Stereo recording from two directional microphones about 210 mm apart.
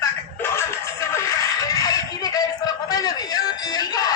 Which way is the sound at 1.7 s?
15° left (ahead or behind).